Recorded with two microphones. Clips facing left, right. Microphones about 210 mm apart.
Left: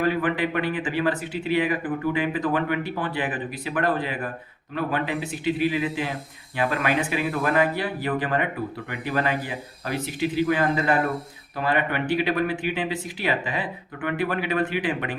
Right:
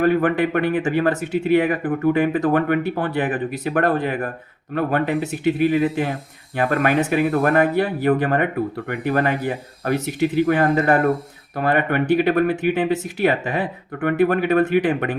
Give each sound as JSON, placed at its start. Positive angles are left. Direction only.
{"t": 0.0, "sound": "speech", "side_deg": -50}